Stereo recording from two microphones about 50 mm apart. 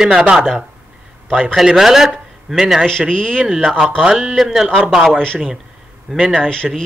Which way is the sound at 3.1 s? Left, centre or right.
Centre.